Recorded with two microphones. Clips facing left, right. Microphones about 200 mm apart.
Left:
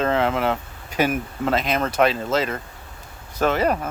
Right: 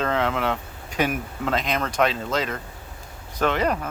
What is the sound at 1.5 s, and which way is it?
Speech, 5° left (ahead or behind).